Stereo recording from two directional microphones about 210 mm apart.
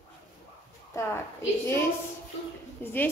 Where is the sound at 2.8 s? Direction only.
10° left (ahead or behind).